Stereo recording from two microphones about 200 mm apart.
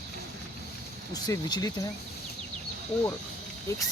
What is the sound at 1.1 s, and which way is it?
Speech, 20° left (ahead or behind).